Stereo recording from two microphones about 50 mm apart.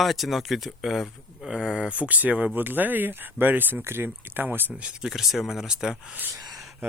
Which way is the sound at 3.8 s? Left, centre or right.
Right.